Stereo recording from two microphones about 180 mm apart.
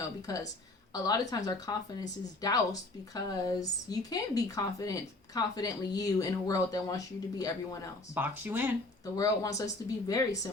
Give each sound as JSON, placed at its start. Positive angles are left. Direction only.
{"t": 0.3, "sound": "speech", "side_deg": 20}
{"t": 8.1, "sound": "speech", "side_deg": -10}
{"t": 9.1, "sound": "speech", "side_deg": 20}